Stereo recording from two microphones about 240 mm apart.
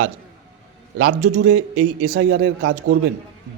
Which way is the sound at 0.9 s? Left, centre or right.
Right.